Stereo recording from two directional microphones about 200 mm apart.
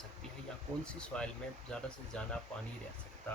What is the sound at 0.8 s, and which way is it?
Speech, 5° left (ahead or behind).